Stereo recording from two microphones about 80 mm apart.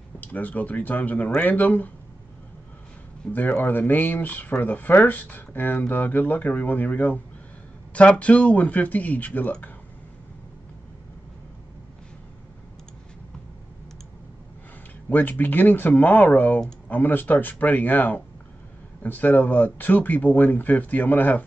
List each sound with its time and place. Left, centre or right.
0.2 s speech: centre
3.3 s speech: left
15.0 s speech: left